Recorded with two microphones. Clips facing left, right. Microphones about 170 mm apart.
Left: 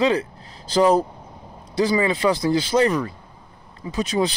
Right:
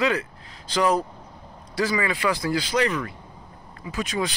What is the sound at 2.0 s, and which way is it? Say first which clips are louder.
A man's voice: left 5 dB; 25° left (ahead or behind).